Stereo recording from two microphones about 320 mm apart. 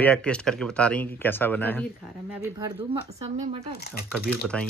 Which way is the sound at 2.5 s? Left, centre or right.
Centre.